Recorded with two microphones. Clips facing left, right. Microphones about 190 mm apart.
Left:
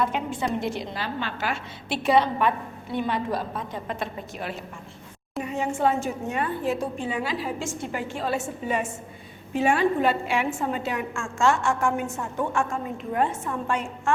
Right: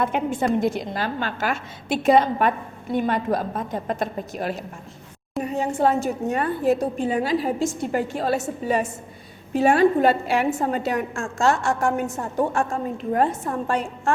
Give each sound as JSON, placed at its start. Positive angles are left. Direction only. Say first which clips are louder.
{"t": 0.0, "sound": "a woman's voice", "louder": "right 4 dB", "side_deg": -50}